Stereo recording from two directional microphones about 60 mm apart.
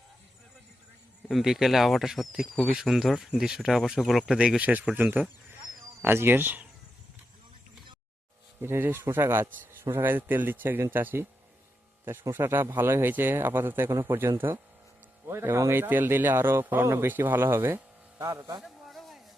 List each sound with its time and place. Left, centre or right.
1.3 s speech: centre
4.3 s speech: centre
4.9 s speech: right
8.6 s speech: right
12.3 s speech: right
17.1 s speech: right
18.2 s speech: right
18.6 s a sound: centre